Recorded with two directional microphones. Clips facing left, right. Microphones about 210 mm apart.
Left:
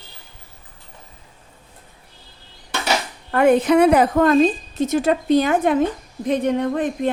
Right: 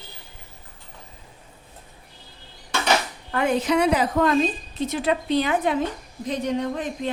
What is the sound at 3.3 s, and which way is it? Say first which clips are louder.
A woman's voice: left 7 dB; 55° left (ahead or behind).